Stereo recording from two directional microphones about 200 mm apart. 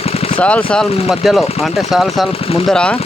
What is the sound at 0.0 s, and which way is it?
Vehicle, 30° left (ahead or behind).